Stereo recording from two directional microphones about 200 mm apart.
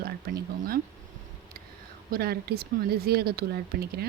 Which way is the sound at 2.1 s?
50° right (ahead or behind).